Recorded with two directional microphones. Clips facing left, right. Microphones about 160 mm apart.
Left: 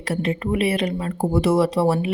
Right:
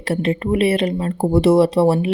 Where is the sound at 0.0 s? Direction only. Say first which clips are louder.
Right 4 dB; 25° right (ahead or behind).